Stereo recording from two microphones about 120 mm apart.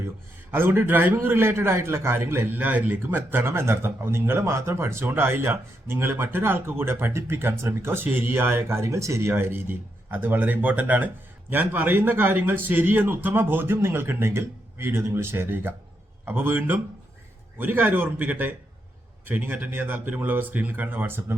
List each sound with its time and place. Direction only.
0.5 s a man's voice: 20° right (ahead or behind)